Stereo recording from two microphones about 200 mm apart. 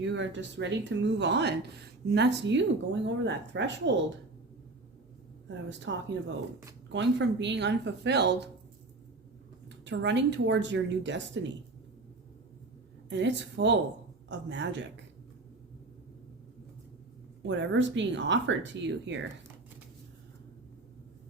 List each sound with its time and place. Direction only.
0.0 s speech: 60° right (ahead or behind)
5.6 s speech: 65° right (ahead or behind)
9.6 s speech: 60° right (ahead or behind)
13.1 s speech: 65° right (ahead or behind)
17.4 s speech: 65° right (ahead or behind)